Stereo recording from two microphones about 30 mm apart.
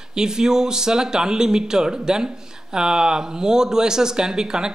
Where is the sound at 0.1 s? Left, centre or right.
Right.